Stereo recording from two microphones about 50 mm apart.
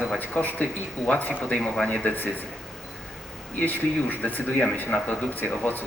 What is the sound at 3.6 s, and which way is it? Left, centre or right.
Speech, left.